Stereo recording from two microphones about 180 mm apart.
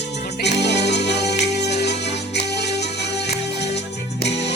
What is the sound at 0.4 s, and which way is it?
Music, 70° left (ahead or behind).